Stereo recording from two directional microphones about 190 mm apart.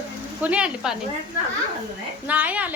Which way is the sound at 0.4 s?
5° right (ahead or behind).